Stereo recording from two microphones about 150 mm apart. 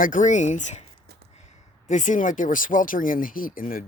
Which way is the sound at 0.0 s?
60° left (ahead or behind).